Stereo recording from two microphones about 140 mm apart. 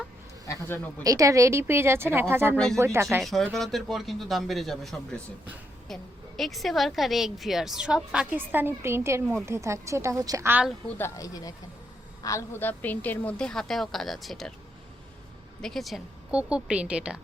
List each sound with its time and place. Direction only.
0.4 s a woman's voice: 20° left (ahead or behind)
1.0 s a woman's voice: 25° right (ahead or behind)
3.2 s a woman's voice: centre (ahead or behind); by 10.7 s 15° right (ahead or behind)
10.8 s a woman's voice: 15° left (ahead or behind)
15.6 s a woman's voice: centre (ahead or behind)